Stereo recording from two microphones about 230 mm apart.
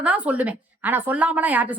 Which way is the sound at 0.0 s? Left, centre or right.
Centre.